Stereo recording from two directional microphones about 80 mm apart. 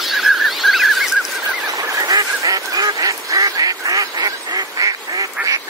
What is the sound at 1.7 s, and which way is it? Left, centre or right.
Goose, right.